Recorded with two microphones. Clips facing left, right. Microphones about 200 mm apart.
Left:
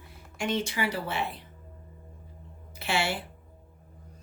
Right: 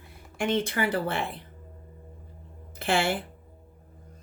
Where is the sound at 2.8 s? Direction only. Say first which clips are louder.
Right 4 dB; 50° right (ahead or behind).